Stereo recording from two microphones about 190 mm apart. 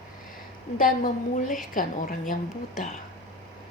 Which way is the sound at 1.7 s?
45° left (ahead or behind).